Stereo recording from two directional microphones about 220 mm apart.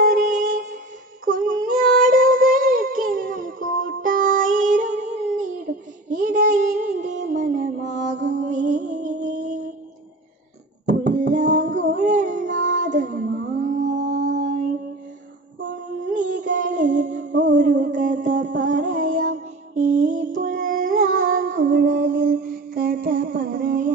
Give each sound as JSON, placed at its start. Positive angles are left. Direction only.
{"t": 0.1, "sound": "music", "side_deg": -35}
{"t": 1.2, "sound": "child singing", "side_deg": -40}
{"t": 8.4, "sound": "music", "side_deg": -35}
{"t": 11.1, "sound": "a sound", "side_deg": -35}
{"t": 11.9, "sound": "music", "side_deg": -30}
{"t": 16.1, "sound": "music", "side_deg": -35}
{"t": 20.3, "sound": "a sound", "side_deg": -35}
{"t": 21.2, "sound": "music", "side_deg": -65}
{"t": 21.5, "sound": "music", "side_deg": -40}